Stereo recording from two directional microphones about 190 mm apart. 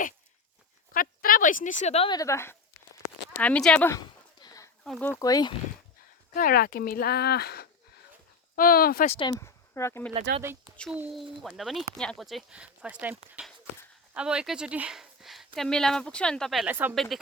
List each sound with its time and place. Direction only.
0.9 s speech: 50° left (ahead or behind); by 2.1 s 35° left (ahead or behind)
2.1 s speech: 15° left (ahead or behind)
4.4 s a sound: 20° left (ahead or behind)
4.8 s speech: 5° left (ahead or behind)
5.2 s speech: 20° left (ahead or behind)
6.3 s speech: 50° left (ahead or behind)
9.0 s speech: 30° left (ahead or behind)
9.4 s speech: 15° left (ahead or behind)
10.3 s speech: 45° right (ahead or behind)
10.9 s speech: 5° right (ahead or behind)